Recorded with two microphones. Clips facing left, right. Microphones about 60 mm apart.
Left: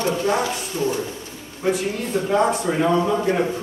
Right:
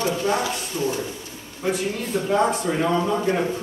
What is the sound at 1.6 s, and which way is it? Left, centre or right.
A man's voice, centre.